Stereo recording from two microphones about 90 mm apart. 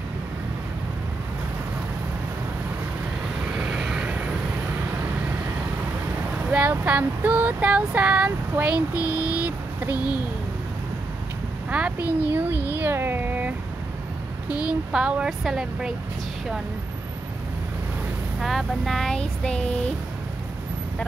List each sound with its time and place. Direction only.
3.5 s vehicle: 10° right (ahead or behind)
6.5 s speech: 20° right (ahead or behind)
9.1 s vehicle: 15° right (ahead or behind)
11.7 s a child's voice: 15° right (ahead or behind)
14.7 s speech: 10° right (ahead or behind)
18.4 s a sound: centre (ahead or behind)